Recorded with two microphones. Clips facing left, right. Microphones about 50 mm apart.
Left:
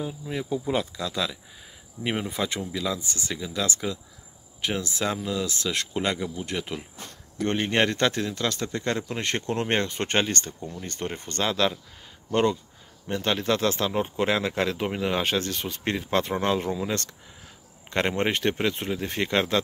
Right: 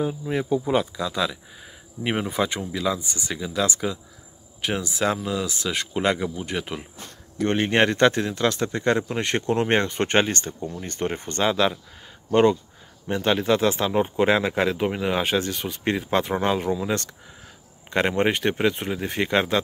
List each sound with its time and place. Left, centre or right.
0.0 s speech: right; by 19.6 s centre